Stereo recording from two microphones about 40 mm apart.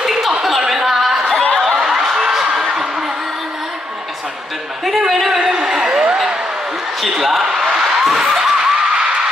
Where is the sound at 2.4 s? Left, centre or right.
Right.